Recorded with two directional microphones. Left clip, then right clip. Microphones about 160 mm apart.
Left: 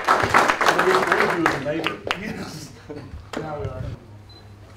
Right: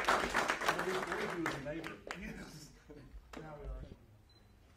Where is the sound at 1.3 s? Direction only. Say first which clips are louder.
Left 18 dB; 35° left (ahead or behind).